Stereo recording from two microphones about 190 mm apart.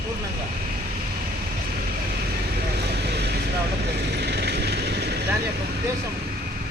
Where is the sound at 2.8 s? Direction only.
60° right (ahead or behind).